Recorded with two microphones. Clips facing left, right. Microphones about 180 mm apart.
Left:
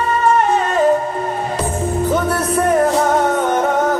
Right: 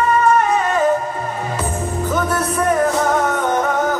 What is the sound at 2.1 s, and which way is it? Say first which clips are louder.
Music: even; 35° left (ahead or behind).